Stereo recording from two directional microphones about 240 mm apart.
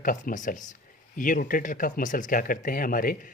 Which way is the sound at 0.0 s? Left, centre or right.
Left.